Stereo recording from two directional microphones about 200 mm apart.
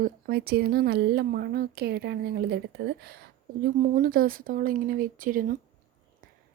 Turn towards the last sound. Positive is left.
turn(degrees=-45)  # may be behind; listen again after turning